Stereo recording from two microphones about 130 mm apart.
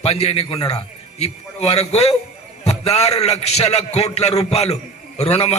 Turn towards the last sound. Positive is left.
turn(degrees=50)  # may be behind; listen again after turning